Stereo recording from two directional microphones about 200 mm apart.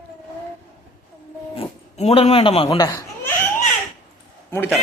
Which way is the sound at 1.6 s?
30° left (ahead or behind).